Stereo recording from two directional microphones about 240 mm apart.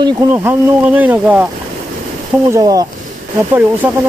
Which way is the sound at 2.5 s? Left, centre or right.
Centre.